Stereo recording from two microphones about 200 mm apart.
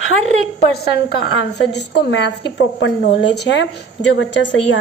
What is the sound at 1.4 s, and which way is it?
A woman's voice, 60° left (ahead or behind).